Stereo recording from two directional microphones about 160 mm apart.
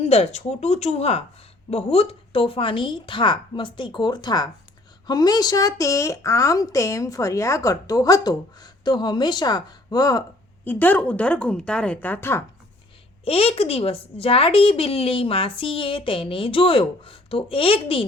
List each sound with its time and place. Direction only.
0.0 s speech: 40° left (ahead or behind); by 12.4 s 10° left (ahead or behind)
13.2 s speech: 40° left (ahead or behind)